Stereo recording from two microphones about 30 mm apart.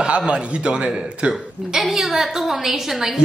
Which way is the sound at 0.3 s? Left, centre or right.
Right.